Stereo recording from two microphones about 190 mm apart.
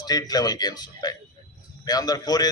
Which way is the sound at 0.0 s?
20° left (ahead or behind).